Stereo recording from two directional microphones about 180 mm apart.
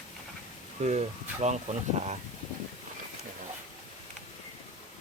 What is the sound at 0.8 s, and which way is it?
Speech, 35° right (ahead or behind).